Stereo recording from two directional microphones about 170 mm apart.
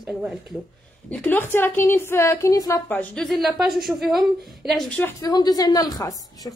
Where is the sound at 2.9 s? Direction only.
5° left (ahead or behind).